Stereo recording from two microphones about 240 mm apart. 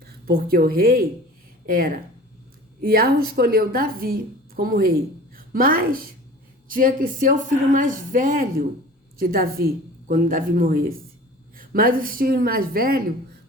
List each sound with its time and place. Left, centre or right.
0.0 s a woman's voice: right